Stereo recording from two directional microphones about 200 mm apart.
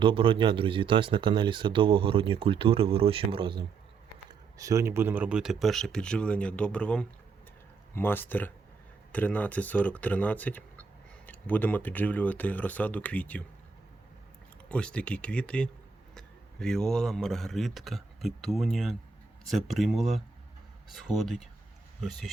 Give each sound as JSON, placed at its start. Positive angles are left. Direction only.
{"t": 0.0, "sound": "speech", "side_deg": -25}
{"t": 14.7, "sound": "a man's voice", "side_deg": 5}